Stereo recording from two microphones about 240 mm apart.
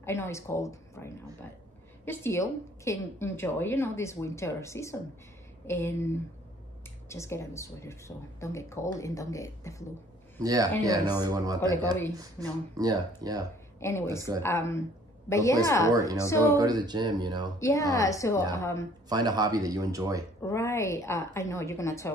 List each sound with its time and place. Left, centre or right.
0.0 s a woman's voice: centre
10.4 s speech: centre
13.7 s speech: centre
14.1 s speech: centre
14.4 s a woman's voice: centre
15.9 s speech: centre
16.2 s a woman's voice: centre
16.4 s speech: centre
17.6 s a woman's voice: centre
19.0 s speech: centre
20.4 s a woman's voice: centre